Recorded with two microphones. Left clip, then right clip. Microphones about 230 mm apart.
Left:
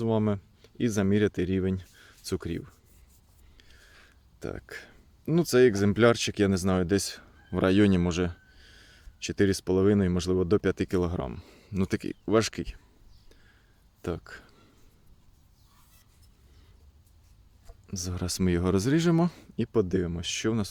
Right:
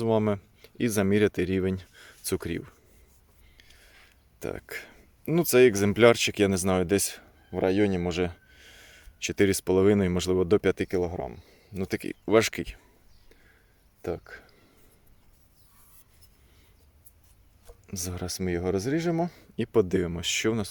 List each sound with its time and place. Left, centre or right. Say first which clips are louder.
0.0 s speech: right 3 dB; centre
4.4 s speech: right 3 dB; centre
7.5 s speech: left 1 dB; centre
8.1 s speech: right 2 dB; centre
10.8 s speech: right 1 dB; centre
11.9 s speech: right 3 dB; centre
14.0 s speech: right 2 dB; centre
17.8 s speech: right 1 dB; centre
18.2 s speech: left 2 dB; centre
19.5 s speech: right 3 dB; centre